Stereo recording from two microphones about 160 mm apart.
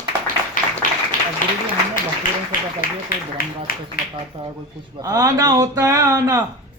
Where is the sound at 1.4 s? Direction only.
55° left (ahead or behind).